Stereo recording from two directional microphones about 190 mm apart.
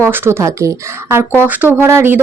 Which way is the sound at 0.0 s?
15° right (ahead or behind).